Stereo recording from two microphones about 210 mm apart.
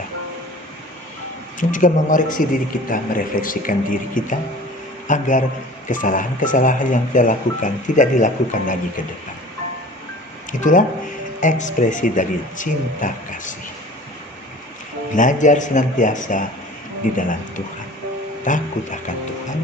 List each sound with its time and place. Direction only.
1.5 s a man's voice: 40° left (ahead or behind)
10.6 s a man's voice: 40° left (ahead or behind)
15.1 s a man's voice: 40° left (ahead or behind)
18.4 s a man's voice: 35° left (ahead or behind)